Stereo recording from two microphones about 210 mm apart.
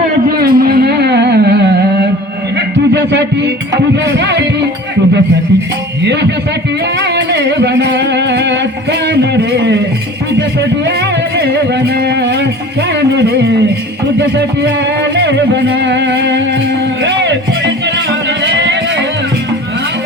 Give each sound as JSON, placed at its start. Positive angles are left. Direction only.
{"t": 0.3, "sound": "music", "side_deg": -45}
{"t": 2.9, "sound": "a sound", "side_deg": -55}
{"t": 4.0, "sound": "music", "side_deg": -55}
{"t": 7.0, "sound": "music", "side_deg": -55}
{"t": 9.0, "sound": "a sound", "side_deg": -55}
{"t": 11.3, "sound": "music", "side_deg": -50}
{"t": 14.2, "sound": "speech", "side_deg": -55}
{"t": 15.1, "sound": "music", "side_deg": -55}
{"t": 18.4, "sound": "music", "side_deg": -55}